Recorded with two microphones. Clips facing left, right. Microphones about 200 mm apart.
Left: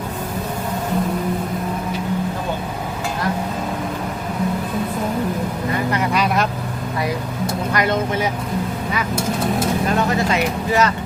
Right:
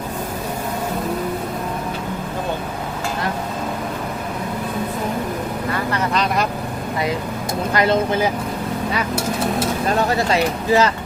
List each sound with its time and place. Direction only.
5.7 s vehicle: 15° left (ahead or behind)
7.7 s speech: 30° right (ahead or behind)
10.1 s speech: 35° right (ahead or behind)